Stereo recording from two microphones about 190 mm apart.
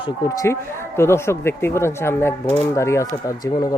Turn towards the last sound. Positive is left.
turn(degrees=15)  # may be behind; listen again after turning